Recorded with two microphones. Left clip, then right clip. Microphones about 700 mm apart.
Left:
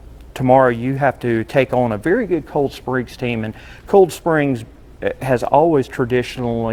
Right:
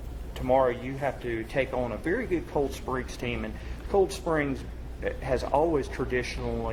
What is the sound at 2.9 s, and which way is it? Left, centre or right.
Speech, left.